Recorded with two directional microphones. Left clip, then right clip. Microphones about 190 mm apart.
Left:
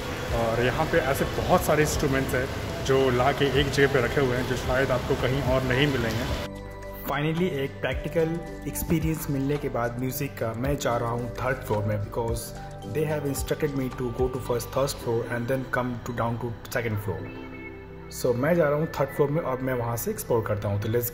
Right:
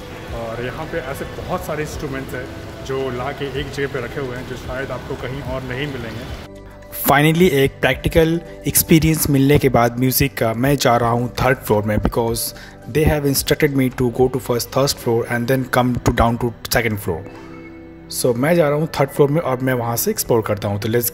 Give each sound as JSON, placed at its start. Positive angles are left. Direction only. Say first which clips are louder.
{"t": 0.6, "sound": "speech", "louder": "left 3 dB", "side_deg": 5}
{"t": 7.1, "sound": "speech", "louder": "right 14 dB", "side_deg": -90}
{"t": 18.4, "sound": "speech", "louder": "right 7 dB", "side_deg": -55}